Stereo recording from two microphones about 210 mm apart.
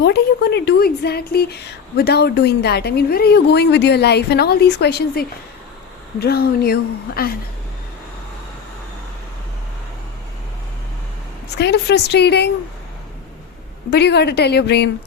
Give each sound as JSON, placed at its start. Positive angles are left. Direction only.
{"t": 0.0, "sound": "a woman's voice", "side_deg": 50}
{"t": 11.5, "sound": "a woman's voice", "side_deg": 55}
{"t": 13.9, "sound": "a woman's voice", "side_deg": 55}